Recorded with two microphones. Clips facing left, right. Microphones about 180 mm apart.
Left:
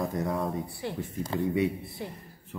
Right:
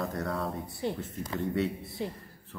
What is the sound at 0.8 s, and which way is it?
Speech, 20° right (ahead or behind).